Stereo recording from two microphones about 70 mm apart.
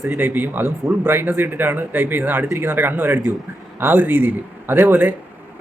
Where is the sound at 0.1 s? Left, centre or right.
Right.